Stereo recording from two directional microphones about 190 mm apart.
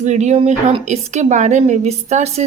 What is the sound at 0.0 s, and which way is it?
A woman's voice, 40° right (ahead or behind).